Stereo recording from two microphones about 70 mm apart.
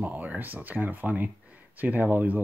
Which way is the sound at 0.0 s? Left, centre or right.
Right.